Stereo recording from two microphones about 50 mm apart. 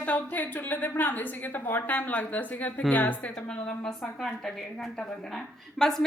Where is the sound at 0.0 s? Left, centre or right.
Left.